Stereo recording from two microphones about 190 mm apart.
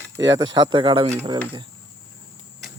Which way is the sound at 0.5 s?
25° right (ahead or behind).